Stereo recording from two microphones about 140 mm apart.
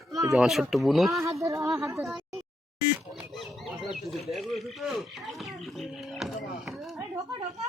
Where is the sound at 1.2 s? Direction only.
20° right (ahead or behind).